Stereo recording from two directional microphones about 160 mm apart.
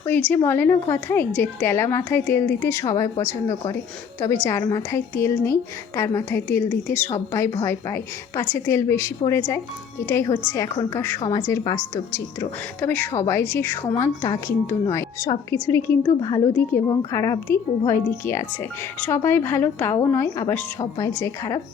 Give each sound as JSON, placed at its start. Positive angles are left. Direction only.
{"t": 0.0, "sound": "a woman's voice", "side_deg": 10}
{"t": 4.4, "sound": "a woman's voice", "side_deg": 20}